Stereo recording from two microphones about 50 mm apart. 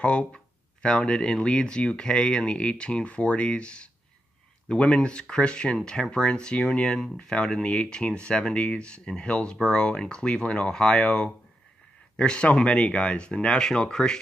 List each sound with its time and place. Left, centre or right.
0.0 s speech: left